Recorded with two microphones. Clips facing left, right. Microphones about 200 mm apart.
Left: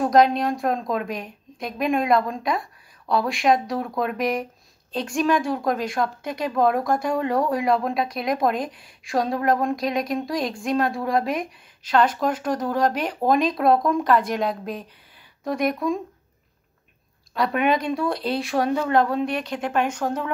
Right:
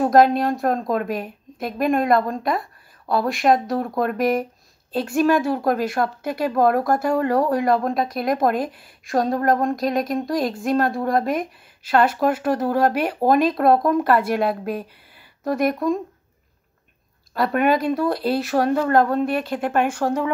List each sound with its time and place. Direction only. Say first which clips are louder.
0.1 s a woman's voice: right 1 dB; centre (ahead or behind)
17.4 s a woman's voice: right 3 dB; centre (ahead or behind)